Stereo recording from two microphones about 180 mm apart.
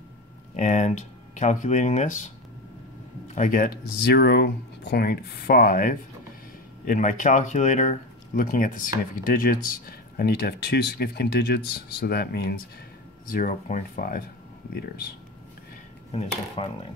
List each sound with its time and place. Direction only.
0.6 s speech: 40° left (ahead or behind)
3.3 s speech: 50° left (ahead or behind)
13.3 s speech: 50° left (ahead or behind)
14.8 s speech: 60° left (ahead or behind)
16.1 s speech: 30° left (ahead or behind)